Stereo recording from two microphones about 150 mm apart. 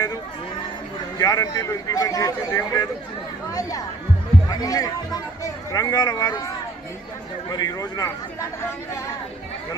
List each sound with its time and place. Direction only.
1.2 s speech: 25° left (ahead or behind)
7.5 s speech: 25° left (ahead or behind)